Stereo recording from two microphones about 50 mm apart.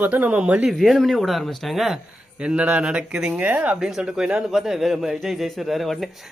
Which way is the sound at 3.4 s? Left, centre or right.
Right.